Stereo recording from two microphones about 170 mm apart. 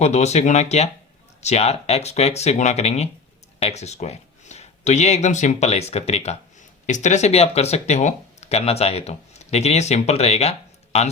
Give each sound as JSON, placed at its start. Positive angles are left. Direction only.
{"t": 0.0, "sound": "speech", "side_deg": 40}